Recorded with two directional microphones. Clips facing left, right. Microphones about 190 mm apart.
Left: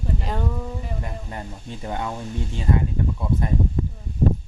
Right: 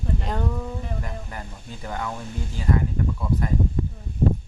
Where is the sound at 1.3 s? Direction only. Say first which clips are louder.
Left 3 dB; 25° left (ahead or behind).